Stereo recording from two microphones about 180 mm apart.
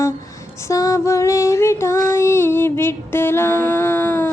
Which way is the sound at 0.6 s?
15° left (ahead or behind).